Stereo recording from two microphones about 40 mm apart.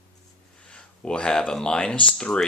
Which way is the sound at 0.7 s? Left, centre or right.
Left.